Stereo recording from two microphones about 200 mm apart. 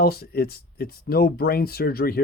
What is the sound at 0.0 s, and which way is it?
Speech, 50° left (ahead or behind).